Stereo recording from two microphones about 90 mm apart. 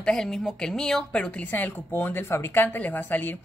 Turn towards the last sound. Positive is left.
turn(degrees=20)  # may be behind; listen again after turning